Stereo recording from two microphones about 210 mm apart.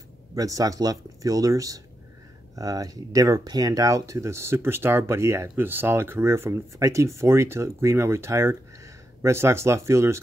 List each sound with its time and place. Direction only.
0.4 s speech: 15° right (ahead or behind)